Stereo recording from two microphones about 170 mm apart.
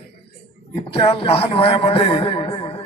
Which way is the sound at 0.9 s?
35° left (ahead or behind).